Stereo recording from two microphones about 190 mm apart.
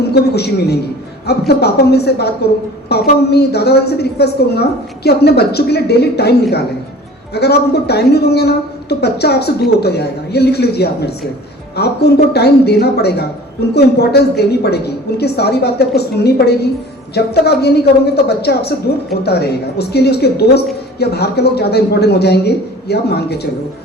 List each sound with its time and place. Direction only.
0.1 s a woman's voice: 60° left (ahead or behind)
7.3 s a woman's voice: 60° left (ahead or behind)